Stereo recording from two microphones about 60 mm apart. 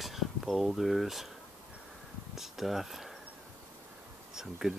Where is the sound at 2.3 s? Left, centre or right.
Centre.